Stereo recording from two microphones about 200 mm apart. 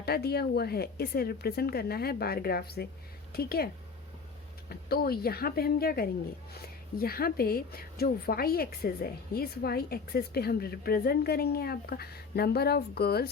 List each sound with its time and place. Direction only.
0.0 s a woman's voice: 50° left (ahead or behind)
4.7 s a woman's voice: 50° left (ahead or behind)